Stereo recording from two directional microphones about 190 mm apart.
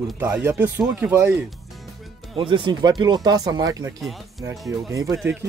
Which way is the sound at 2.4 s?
25° right (ahead or behind).